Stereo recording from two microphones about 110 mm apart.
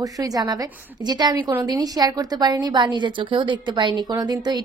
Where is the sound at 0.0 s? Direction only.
30° right (ahead or behind).